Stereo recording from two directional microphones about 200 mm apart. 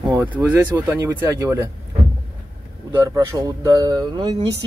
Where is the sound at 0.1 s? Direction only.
15° right (ahead or behind).